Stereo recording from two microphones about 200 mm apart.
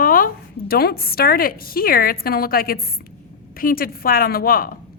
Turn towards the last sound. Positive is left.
turn(degrees=45)  # may be behind; listen again after turning